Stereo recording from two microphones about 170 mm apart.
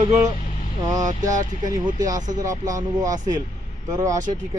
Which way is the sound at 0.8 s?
20° right (ahead or behind).